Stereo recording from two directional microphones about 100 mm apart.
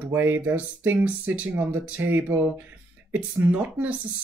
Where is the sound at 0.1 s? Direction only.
20° right (ahead or behind).